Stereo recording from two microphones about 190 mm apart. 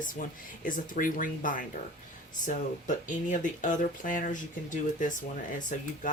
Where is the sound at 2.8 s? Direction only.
40° left (ahead or behind).